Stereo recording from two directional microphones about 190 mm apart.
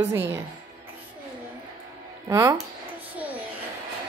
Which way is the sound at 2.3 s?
15° right (ahead or behind).